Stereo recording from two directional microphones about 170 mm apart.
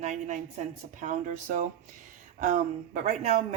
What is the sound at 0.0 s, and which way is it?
Speech, 45° right (ahead or behind).